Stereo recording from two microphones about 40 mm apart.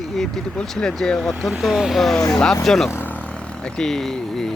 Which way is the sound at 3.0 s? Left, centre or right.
Left.